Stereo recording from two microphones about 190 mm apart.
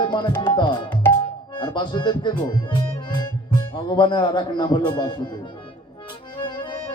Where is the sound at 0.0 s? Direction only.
25° left (ahead or behind).